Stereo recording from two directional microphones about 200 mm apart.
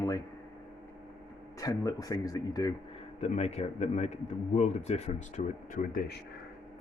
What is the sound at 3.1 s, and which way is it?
A man's voice, 35° left (ahead or behind).